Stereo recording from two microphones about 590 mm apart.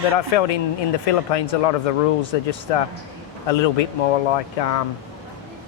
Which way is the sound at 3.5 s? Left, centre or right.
Left.